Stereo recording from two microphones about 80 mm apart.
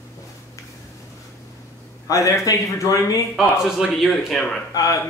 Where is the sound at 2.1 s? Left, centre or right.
Left.